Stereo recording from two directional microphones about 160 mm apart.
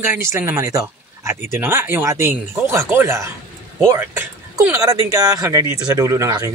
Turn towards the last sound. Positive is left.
turn(degrees=-20)  # may be behind; listen again after turning